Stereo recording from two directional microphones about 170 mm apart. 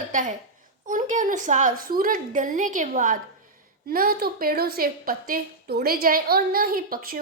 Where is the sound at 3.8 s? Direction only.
60° right (ahead or behind).